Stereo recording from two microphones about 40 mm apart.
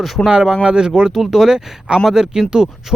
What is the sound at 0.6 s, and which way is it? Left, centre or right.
Speech, right.